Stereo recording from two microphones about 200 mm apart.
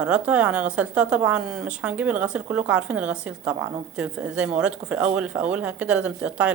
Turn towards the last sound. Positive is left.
turn(degrees=-5)  # may be behind; listen again after turning